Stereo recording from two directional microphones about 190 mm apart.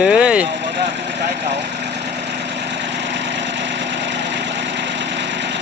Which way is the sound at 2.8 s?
65° right (ahead or behind).